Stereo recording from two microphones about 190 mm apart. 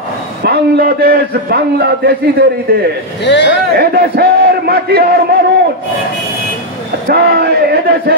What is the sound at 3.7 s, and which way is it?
A man's voice, 55° right (ahead or behind).